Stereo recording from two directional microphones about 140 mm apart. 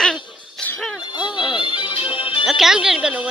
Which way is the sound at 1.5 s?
35° left (ahead or behind).